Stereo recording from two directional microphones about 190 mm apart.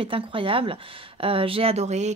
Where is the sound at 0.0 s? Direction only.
25° right (ahead or behind).